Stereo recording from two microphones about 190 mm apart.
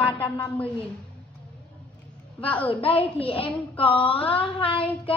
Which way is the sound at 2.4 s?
5° left (ahead or behind).